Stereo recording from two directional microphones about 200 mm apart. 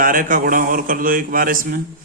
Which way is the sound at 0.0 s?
40° right (ahead or behind).